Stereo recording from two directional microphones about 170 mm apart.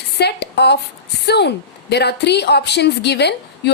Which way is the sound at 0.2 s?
75° left (ahead or behind).